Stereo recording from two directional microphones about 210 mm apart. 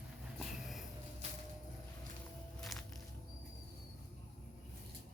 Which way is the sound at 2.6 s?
Centre (ahead or behind).